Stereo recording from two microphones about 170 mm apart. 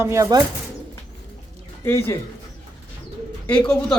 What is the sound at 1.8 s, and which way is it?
Speech, 15° left (ahead or behind).